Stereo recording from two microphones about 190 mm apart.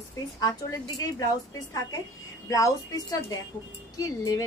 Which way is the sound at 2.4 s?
15° left (ahead or behind).